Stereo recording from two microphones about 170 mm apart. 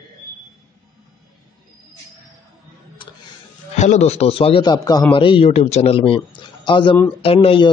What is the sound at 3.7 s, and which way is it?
Speech, 40° left (ahead or behind).